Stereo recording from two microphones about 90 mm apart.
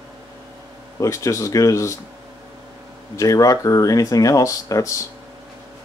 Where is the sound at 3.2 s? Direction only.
40° left (ahead or behind).